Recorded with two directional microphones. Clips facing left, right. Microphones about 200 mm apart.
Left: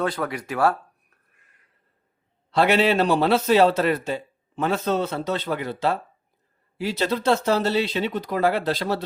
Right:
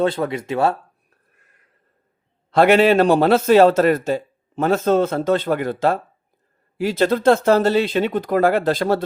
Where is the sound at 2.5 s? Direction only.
50° right (ahead or behind).